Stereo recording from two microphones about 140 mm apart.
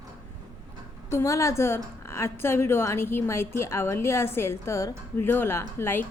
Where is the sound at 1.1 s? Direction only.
20° left (ahead or behind).